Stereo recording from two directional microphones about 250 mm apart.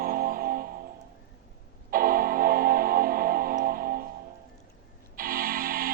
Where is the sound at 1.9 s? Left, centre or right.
Right.